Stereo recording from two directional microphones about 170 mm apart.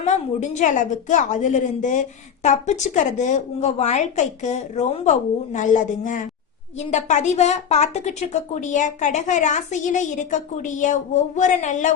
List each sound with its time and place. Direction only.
0.0 s a woman's voice: 45° left (ahead or behind)